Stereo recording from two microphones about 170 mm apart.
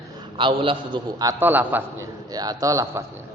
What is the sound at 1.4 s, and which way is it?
A man's voice, 10° right (ahead or behind).